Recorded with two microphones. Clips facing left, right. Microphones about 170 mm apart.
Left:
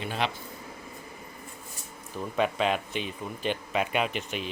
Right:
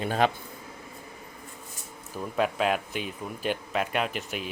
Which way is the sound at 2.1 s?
5° right (ahead or behind).